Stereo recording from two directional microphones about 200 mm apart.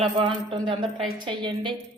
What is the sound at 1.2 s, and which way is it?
Speech, 25° right (ahead or behind).